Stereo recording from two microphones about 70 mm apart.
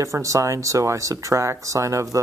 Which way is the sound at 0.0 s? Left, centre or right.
Right.